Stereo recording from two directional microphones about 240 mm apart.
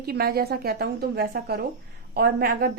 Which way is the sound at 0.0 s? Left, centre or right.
Right.